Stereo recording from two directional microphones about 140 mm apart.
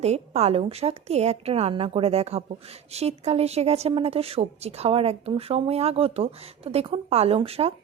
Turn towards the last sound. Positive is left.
turn(degrees=-45)  # may be behind; listen again after turning